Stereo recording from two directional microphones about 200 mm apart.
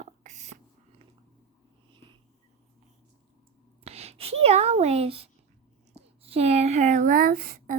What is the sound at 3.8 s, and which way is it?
A woman's voice, 30° right (ahead or behind).